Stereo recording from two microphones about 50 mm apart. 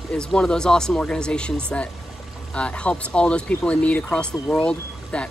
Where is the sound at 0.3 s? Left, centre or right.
Centre.